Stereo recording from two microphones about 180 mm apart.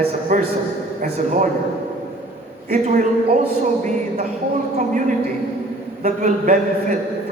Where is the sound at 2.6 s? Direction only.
50° right (ahead or behind).